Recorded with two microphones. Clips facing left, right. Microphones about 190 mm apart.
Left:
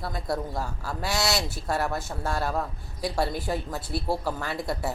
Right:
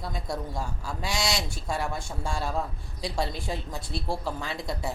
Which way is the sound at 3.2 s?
25° right (ahead or behind).